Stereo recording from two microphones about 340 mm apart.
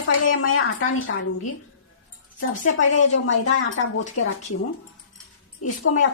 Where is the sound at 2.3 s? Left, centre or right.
Left.